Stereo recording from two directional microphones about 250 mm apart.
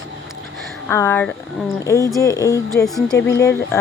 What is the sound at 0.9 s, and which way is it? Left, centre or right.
Speech, centre.